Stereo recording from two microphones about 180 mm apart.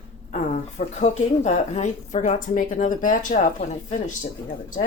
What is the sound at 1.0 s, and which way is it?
Speech, 40° left (ahead or behind).